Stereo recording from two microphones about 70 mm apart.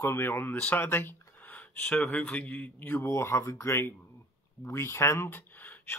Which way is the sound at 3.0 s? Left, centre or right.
Left.